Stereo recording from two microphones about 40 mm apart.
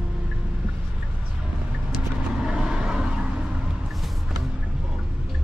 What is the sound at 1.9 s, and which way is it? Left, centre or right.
Vehicle, centre.